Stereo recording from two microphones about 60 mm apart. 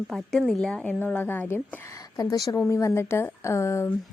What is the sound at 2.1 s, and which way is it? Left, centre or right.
Speech, left.